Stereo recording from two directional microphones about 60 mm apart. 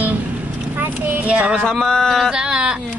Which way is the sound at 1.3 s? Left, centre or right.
Centre.